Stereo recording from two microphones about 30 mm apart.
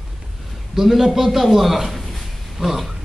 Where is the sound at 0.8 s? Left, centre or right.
Centre.